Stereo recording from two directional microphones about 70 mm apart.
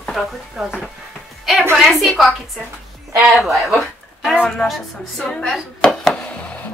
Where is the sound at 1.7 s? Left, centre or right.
Centre.